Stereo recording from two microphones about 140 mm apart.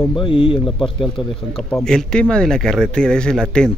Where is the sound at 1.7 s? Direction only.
5° left (ahead or behind).